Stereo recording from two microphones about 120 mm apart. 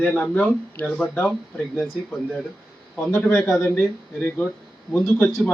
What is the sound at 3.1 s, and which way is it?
Speech, 15° left (ahead or behind).